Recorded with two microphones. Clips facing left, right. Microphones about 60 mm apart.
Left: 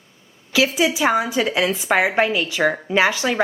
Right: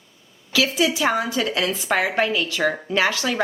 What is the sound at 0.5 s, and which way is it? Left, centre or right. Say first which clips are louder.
A woman's voice: left 2 dB; centre.